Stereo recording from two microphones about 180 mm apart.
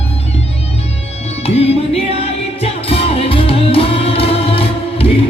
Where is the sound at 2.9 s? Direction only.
30° left (ahead or behind).